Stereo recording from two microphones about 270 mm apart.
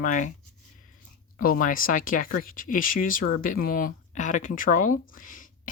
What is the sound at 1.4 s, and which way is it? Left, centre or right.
Speech, left.